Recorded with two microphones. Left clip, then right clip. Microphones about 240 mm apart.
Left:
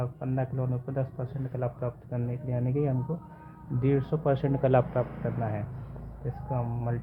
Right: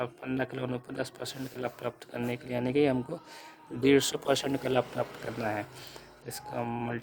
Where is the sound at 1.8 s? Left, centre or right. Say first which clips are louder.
Even; right.